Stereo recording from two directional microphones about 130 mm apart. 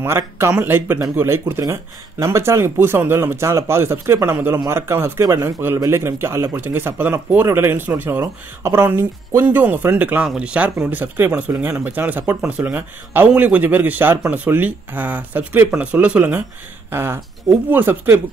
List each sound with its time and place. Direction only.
0.0 s speech: 20° right (ahead or behind)